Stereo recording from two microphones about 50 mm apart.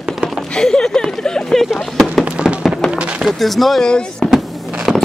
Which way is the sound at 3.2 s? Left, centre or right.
Centre.